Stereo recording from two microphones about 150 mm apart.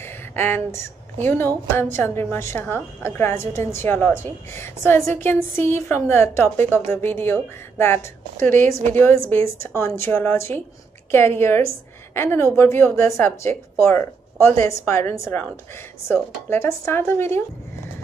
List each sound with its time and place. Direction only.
0.0 s a woman's voice: 15° left (ahead or behind)